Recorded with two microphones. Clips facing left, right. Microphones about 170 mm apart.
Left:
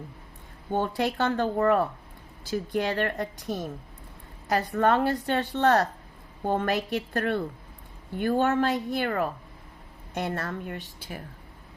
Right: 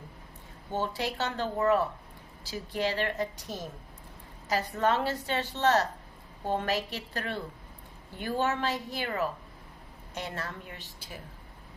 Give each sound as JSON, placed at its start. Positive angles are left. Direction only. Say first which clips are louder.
{"t": 0.7, "sound": "a woman's voice", "louder": "left 5 dB", "side_deg": 55}